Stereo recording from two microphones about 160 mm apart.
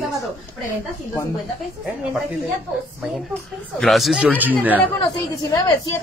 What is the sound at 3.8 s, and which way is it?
A woman's voice, centre (ahead or behind).